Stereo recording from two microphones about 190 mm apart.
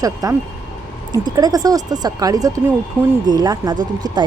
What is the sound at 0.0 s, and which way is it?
Speech, 20° right (ahead or behind).